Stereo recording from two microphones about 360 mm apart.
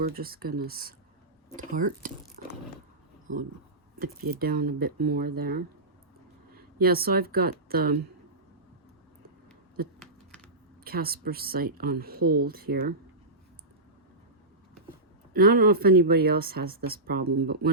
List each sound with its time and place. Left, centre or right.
0.0 s speech: right
4.0 s speech: right
10.8 s a woman's voice: right
15.3 s speech: right